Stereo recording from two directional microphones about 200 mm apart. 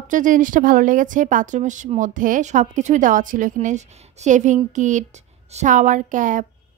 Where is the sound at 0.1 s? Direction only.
40° right (ahead or behind).